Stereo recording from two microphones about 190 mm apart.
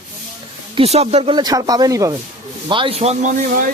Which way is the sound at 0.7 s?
35° right (ahead or behind).